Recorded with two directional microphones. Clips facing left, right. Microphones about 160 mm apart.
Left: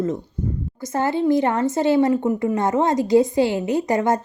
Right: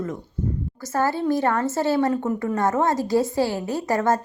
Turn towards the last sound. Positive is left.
turn(degrees=20)  # may be behind; listen again after turning